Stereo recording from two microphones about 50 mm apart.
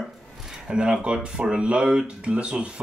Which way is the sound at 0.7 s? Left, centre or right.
Right.